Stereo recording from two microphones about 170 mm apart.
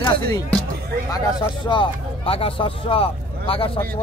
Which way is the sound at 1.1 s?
25° left (ahead or behind).